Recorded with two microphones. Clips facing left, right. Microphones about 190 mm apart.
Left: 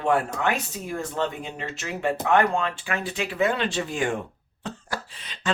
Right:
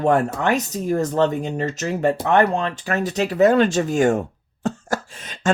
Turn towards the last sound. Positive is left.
turn(degrees=-45)  # may be behind; listen again after turning